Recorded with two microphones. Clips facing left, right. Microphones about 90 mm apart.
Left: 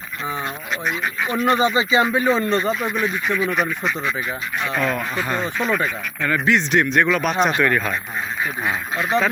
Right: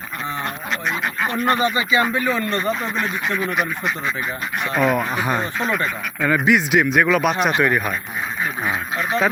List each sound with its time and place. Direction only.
1.2 s speech: 50° right (ahead or behind)
1.5 s speech: 20° left (ahead or behind)
3.5 s speech: 5° right (ahead or behind)